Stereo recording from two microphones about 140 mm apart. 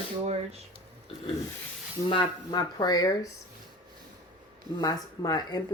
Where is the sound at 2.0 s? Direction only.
35° left (ahead or behind).